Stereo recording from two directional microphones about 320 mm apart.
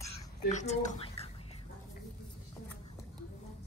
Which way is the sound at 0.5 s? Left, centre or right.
Left.